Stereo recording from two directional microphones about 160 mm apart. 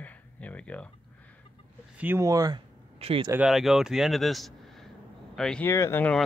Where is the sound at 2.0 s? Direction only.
15° right (ahead or behind).